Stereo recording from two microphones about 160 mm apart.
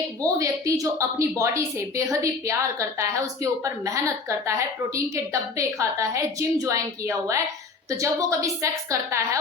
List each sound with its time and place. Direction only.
0.3 s a woman's voice: 20° right (ahead or behind)